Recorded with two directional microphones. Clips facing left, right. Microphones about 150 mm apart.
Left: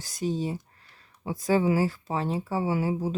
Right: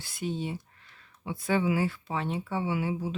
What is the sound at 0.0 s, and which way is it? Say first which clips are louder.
Speech: left 4 dB; 40° left (ahead or behind).